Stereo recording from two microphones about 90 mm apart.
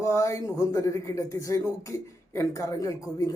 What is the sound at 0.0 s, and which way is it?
A man's voice, 35° left (ahead or behind).